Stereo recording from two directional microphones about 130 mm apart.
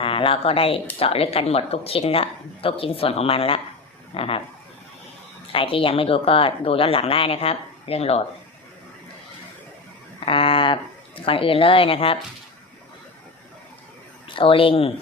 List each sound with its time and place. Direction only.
0.0 s a woman's voice: 45° left (ahead or behind)
5.5 s a woman's voice: 45° left (ahead or behind)
10.2 s speech: 45° left (ahead or behind)
14.3 s speech: 45° left (ahead or behind)